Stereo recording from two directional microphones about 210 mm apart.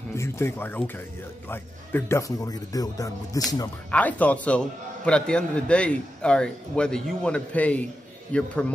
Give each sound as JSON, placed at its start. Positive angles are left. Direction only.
{"t": 0.1, "sound": "speech", "side_deg": 10}
{"t": 3.9, "sound": "a man's voice", "side_deg": 5}